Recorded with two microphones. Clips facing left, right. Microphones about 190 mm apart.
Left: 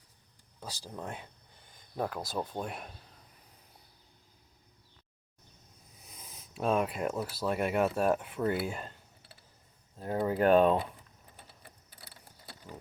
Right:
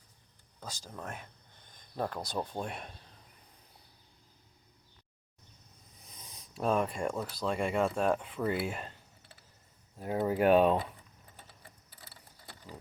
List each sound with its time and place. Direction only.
0.6 s speech: 15° left (ahead or behind)
6.1 s speech: 5° left (ahead or behind)
10.0 s speech: 10° right (ahead or behind)